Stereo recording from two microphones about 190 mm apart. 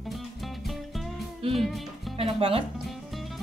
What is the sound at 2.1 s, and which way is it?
Speech, 30° right (ahead or behind).